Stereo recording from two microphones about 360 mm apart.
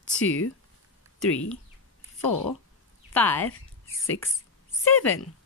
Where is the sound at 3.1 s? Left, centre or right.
Centre.